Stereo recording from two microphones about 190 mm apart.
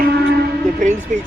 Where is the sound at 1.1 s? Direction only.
40° right (ahead or behind).